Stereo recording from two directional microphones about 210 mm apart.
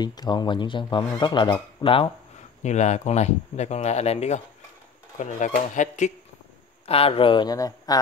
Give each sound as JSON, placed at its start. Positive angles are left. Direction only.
{"t": 0.0, "sound": "speech", "side_deg": 20}